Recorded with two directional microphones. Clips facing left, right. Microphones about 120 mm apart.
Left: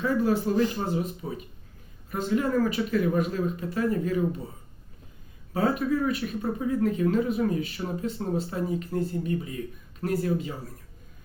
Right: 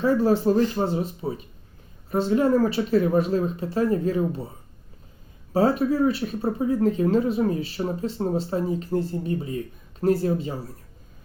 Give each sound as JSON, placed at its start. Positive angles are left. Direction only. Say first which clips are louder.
{"t": 0.0, "sound": "speech", "louder": "right 5 dB", "side_deg": -35}
{"t": 5.5, "sound": "speech", "louder": "right 5 dB", "side_deg": -35}